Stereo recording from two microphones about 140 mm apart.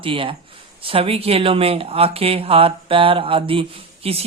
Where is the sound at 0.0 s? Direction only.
40° right (ahead or behind).